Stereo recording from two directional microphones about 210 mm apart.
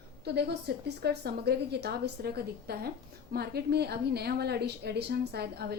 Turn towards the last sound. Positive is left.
turn(degrees=-50)  # may be behind; listen again after turning